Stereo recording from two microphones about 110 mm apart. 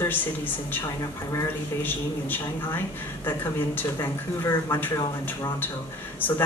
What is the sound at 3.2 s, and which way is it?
Speech, 20° left (ahead or behind).